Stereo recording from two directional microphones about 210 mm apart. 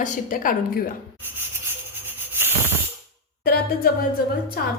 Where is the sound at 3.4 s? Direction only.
45° left (ahead or behind).